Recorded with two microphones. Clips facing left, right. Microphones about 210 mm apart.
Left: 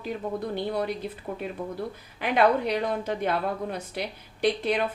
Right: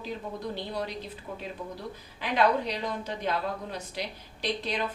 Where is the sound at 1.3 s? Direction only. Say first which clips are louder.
Left 5 dB; 55° left (ahead or behind).